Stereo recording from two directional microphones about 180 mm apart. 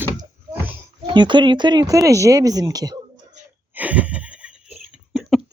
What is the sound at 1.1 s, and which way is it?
Speech, 25° right (ahead or behind).